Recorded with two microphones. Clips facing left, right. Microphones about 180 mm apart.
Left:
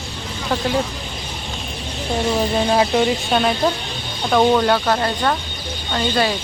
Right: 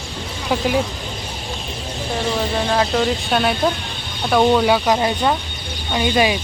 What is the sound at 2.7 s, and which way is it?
Speech, 15° left (ahead or behind).